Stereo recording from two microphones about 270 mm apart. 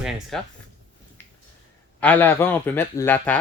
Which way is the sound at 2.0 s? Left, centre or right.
Centre.